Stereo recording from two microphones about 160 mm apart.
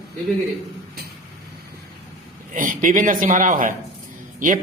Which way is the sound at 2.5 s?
55° right (ahead or behind).